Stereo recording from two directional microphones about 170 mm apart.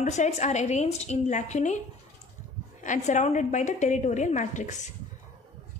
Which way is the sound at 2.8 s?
45° left (ahead or behind).